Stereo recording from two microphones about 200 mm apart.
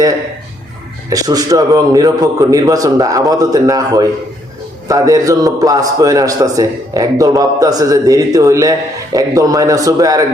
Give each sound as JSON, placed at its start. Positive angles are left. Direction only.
{"t": 1.1, "sound": "a man's voice", "side_deg": -20}